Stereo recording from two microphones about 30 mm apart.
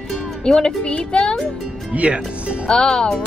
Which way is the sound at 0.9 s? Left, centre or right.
Left.